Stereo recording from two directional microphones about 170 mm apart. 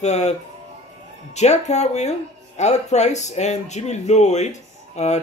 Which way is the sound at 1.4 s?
40° left (ahead or behind).